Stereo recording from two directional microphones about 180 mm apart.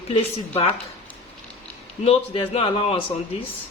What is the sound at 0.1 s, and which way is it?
Speech, 35° left (ahead or behind).